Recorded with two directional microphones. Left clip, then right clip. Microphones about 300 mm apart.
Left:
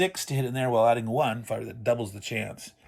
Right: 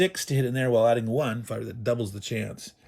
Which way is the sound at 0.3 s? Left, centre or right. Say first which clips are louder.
Right 2 dB; centre.